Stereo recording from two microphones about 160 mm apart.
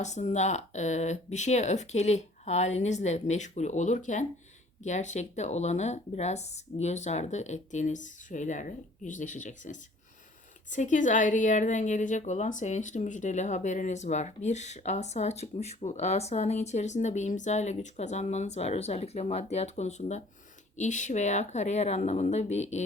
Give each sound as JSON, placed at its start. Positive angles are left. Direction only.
{"t": 0.0, "sound": "a woman's voice", "side_deg": 45}